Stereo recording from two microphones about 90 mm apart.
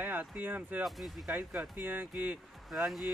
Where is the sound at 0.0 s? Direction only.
20° right (ahead or behind).